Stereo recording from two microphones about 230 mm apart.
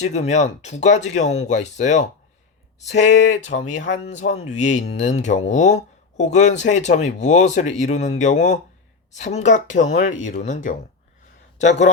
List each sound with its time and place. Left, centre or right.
0.0 s speech: left